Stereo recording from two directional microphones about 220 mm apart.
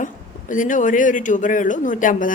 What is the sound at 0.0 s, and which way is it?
A man's voice, 35° left (ahead or behind).